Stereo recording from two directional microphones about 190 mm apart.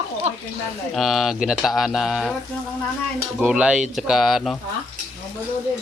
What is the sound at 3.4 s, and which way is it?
Speech, 5° right (ahead or behind).